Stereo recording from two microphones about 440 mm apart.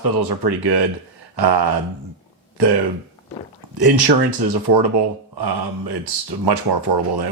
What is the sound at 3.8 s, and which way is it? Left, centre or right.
A man's voice, right.